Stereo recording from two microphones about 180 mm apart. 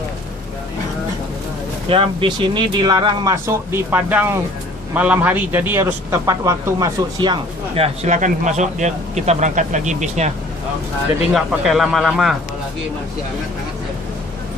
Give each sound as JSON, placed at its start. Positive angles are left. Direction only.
{"t": 1.9, "sound": "speech", "side_deg": -30}
{"t": 3.4, "sound": "a man's voice", "side_deg": -15}
{"t": 7.8, "sound": "speech", "side_deg": -40}
{"t": 11.3, "sound": "speech", "side_deg": 0}